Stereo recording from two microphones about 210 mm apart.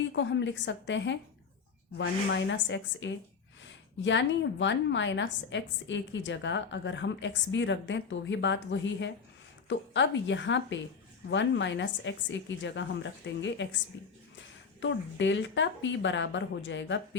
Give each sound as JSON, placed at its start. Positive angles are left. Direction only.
{"t": 0.1, "sound": "a woman's voice", "side_deg": 60}